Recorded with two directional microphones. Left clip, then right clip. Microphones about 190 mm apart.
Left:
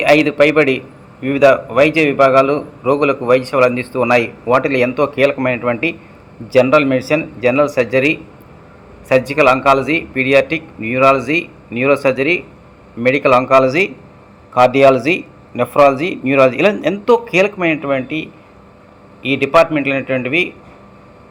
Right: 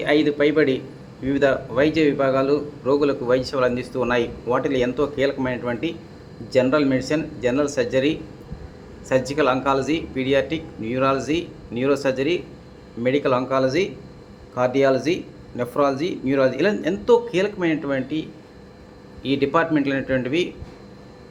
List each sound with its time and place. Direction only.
0.0 s a man's voice: 25° left (ahead or behind); by 20.3 s 5° left (ahead or behind)